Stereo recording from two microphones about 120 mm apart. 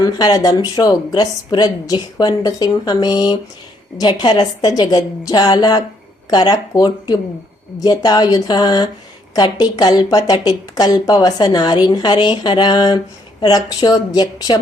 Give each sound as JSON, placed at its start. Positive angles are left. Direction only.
{"t": 0.0, "sound": "speech", "side_deg": 35}